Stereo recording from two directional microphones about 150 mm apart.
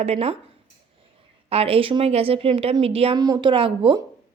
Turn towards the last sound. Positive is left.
turn(degrees=-35)  # may be behind; listen again after turning